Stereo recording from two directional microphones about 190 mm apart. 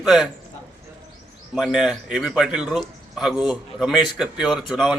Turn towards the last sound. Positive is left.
turn(degrees=0)  # may be behind; listen again after turning